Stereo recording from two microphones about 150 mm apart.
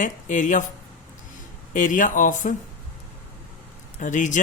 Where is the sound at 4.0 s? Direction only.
55° left (ahead or behind).